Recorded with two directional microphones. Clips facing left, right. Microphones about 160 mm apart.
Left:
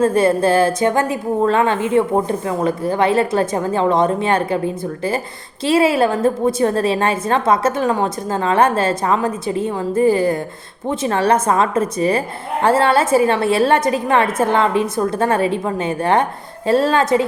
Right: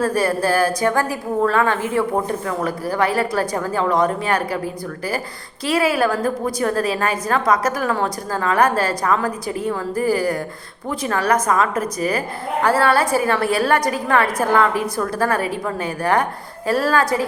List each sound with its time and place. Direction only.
0.0 s a woman's voice: 25° left (ahead or behind)